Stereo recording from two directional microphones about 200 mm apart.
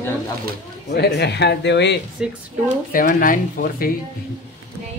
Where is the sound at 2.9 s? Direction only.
45° left (ahead or behind).